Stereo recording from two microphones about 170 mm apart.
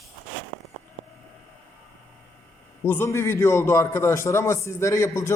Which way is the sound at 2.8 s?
15° left (ahead or behind).